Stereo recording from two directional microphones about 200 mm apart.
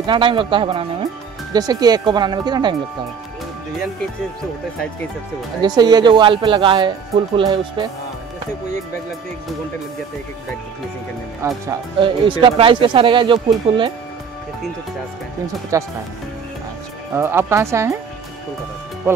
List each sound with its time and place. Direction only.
0.0 s speech: 25° right (ahead or behind)
5.6 s speech: 20° right (ahead or behind)
11.4 s speech: 20° right (ahead or behind)
15.7 s speech: 15° right (ahead or behind)
17.1 s speech: 10° right (ahead or behind)